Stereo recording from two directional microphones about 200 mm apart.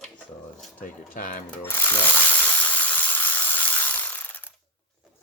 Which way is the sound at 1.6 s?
10° left (ahead or behind).